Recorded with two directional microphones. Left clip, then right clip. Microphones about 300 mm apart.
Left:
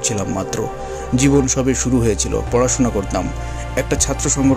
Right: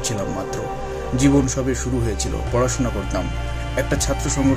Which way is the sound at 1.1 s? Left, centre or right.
Left.